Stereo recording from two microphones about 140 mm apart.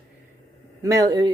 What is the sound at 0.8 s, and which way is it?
Speech, 25° right (ahead or behind).